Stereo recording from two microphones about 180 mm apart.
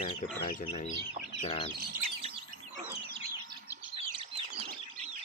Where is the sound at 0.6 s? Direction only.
35° left (ahead or behind).